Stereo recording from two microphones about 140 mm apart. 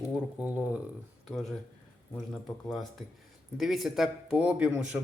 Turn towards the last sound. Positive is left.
turn(degrees=-10)  # may be behind; listen again after turning